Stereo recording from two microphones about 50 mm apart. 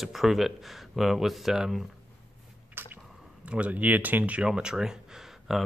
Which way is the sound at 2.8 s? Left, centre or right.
Right.